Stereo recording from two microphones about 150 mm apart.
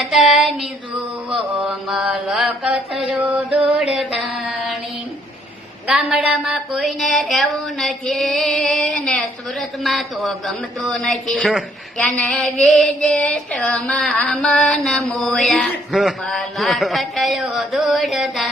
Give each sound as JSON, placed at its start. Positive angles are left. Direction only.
{"t": 0.0, "sound": "child singing", "side_deg": 0}
{"t": 1.3, "sound": "mantra", "side_deg": -5}
{"t": 5.9, "sound": "a woman's voice", "side_deg": -5}